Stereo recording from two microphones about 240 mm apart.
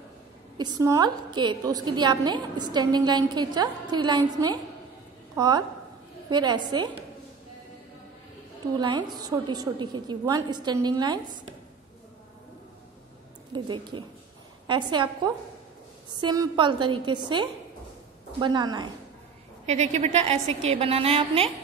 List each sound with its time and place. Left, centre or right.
0.6 s a woman's voice: centre
8.7 s a woman's voice: centre
13.5 s a woman's voice: centre
19.6 s a woman's voice: right